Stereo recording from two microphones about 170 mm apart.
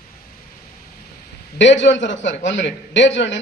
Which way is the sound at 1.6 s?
90° left.